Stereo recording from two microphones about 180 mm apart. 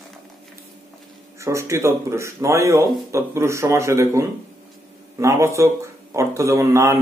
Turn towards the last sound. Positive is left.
turn(degrees=-15)  # may be behind; listen again after turning